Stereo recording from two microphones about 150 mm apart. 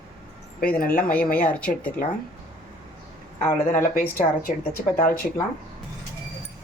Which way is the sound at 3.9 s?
65° left (ahead or behind).